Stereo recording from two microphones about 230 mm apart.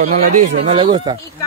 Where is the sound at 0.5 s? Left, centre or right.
Right.